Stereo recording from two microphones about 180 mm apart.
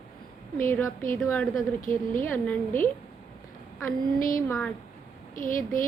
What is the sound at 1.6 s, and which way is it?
Speech, 50° left (ahead or behind).